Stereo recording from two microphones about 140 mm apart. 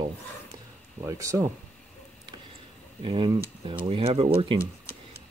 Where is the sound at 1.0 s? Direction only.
25° right (ahead or behind).